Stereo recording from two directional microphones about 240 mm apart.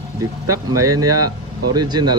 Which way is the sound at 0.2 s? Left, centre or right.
Right.